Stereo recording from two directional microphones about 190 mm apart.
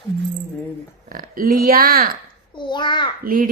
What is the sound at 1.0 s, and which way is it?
Speech, 45° right (ahead or behind).